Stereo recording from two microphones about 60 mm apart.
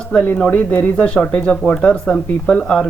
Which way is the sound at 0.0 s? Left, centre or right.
Centre.